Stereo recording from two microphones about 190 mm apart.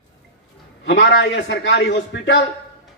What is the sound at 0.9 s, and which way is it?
A man's voice, 75° left (ahead or behind).